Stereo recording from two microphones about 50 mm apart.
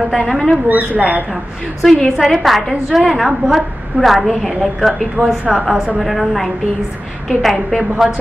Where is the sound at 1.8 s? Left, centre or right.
Centre.